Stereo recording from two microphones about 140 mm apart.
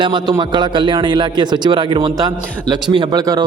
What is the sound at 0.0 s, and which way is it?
A man's voice, 35° right (ahead or behind).